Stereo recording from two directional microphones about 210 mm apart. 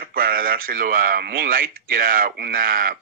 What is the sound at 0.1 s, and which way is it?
A man's voice, 45° right (ahead or behind).